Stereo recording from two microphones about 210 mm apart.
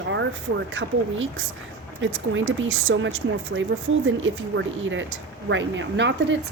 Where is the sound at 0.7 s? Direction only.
60° right (ahead or behind).